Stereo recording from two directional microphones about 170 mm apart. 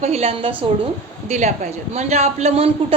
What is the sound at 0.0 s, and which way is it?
Speech, 40° right (ahead or behind).